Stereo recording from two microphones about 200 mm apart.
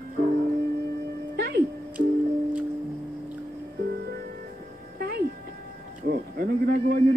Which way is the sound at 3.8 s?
55° right (ahead or behind).